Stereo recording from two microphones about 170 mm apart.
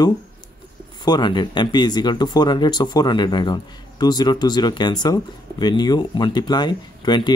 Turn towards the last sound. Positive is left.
turn(degrees=25)  # may be behind; listen again after turning